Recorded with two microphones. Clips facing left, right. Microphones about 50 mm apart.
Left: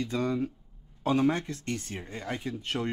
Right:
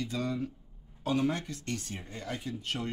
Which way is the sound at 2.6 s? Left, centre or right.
Left.